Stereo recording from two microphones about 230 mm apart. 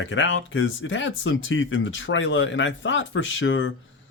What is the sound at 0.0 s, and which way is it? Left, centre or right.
Speech, left.